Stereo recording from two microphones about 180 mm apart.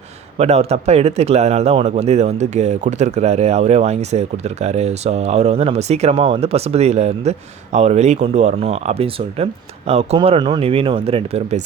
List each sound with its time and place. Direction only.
0.3 s a man's voice: 35° right (ahead or behind)